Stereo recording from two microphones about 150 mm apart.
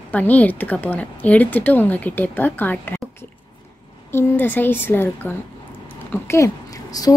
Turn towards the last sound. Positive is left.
turn(degrees=20)  # may be behind; listen again after turning